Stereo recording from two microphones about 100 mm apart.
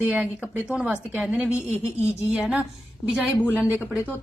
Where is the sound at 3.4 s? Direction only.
20° left (ahead or behind).